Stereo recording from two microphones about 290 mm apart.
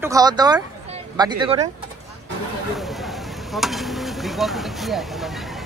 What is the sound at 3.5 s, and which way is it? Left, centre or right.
A man's voice, centre.